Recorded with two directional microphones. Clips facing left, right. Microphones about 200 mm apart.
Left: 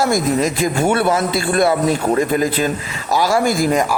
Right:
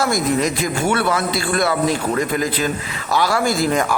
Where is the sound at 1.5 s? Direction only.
25° left (ahead or behind).